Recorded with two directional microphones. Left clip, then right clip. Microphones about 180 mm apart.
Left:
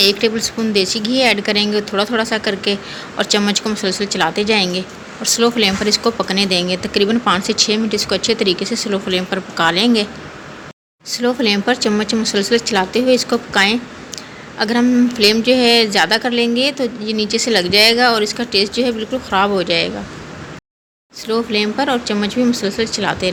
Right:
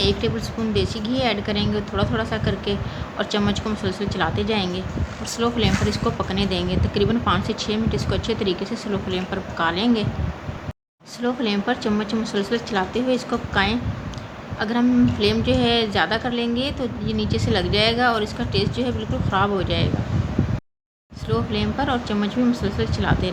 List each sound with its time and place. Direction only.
0.0 s speech: 20° left (ahead or behind)
11.1 s a woman's voice: 20° left (ahead or behind)
21.2 s a woman's voice: 20° left (ahead or behind)